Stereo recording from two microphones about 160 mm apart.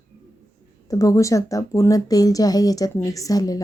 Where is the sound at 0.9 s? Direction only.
20° left (ahead or behind).